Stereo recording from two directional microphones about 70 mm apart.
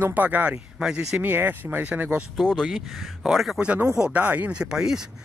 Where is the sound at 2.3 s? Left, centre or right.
Centre.